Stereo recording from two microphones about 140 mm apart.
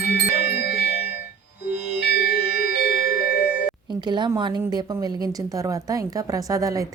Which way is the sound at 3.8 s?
30° right (ahead or behind).